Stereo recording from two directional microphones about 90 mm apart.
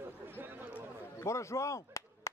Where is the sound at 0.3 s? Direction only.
20° right (ahead or behind).